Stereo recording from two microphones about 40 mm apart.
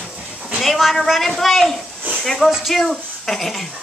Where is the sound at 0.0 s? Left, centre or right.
Right.